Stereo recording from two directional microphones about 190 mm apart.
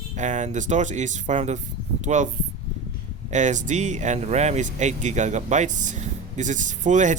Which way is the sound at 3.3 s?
40° right (ahead or behind).